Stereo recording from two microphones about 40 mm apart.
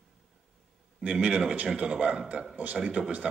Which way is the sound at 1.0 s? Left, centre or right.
Right.